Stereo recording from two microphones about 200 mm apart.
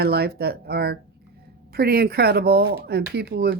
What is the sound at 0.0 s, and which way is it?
Speech, 50° right (ahead or behind).